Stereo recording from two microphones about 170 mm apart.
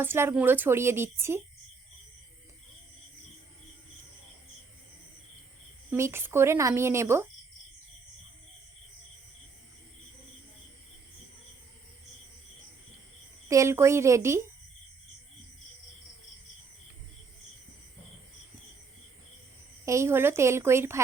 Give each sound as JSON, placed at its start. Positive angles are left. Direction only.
{"t": 0.0, "sound": "a woman's voice", "side_deg": -15}
{"t": 5.9, "sound": "a woman's voice", "side_deg": -15}
{"t": 13.5, "sound": "a woman's voice", "side_deg": -15}
{"t": 19.8, "sound": "a woman's voice", "side_deg": -15}